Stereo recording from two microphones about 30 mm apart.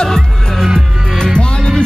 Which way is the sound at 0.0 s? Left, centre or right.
Centre.